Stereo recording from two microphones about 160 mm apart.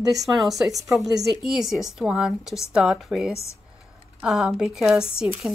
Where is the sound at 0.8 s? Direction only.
20° right (ahead or behind).